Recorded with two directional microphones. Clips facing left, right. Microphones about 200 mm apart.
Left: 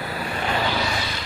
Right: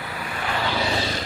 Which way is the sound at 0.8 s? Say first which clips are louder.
Right 2 dB; 30° right (ahead or behind).